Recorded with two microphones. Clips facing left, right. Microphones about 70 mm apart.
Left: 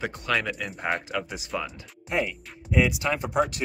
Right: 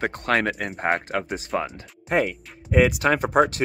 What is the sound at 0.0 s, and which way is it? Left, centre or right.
Speech, right.